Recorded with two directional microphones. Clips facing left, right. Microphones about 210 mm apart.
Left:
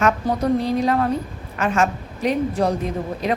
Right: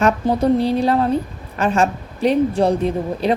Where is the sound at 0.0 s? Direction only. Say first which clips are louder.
Right 3 dB; 30° right (ahead or behind).